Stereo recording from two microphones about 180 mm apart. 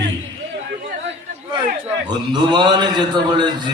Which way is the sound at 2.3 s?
25° right (ahead or behind).